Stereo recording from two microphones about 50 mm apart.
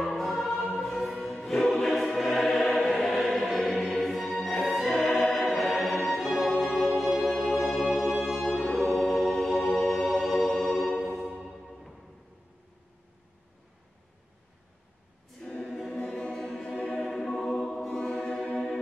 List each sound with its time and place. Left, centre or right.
0.0 s choir: centre
0.7 s music: centre
8.0 s music: centre
8.3 s music: centre
15.4 s choir: centre
15.9 s music: left